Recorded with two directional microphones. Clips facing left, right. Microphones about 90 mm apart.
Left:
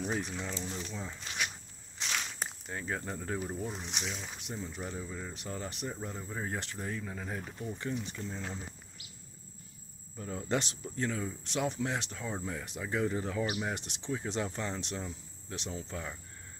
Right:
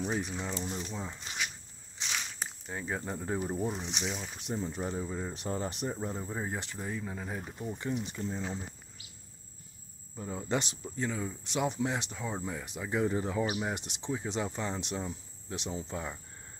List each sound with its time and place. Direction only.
0.0 s speech: 5° right (ahead or behind)
0.7 s speech: 25° right (ahead or behind)
2.0 s a sound: centre (ahead or behind)
3.7 s speech: 5° left (ahead or behind)
4.0 s speech: 10° right (ahead or behind)
4.4 s speech: 30° right (ahead or behind)
10.1 s speech: 10° right (ahead or behind)
13.0 s speech: 20° right (ahead or behind)